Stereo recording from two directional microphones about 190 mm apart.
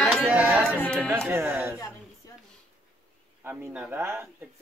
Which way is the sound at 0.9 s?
10° right (ahead or behind).